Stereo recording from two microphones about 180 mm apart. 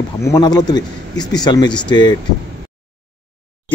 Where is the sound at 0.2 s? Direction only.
20° left (ahead or behind).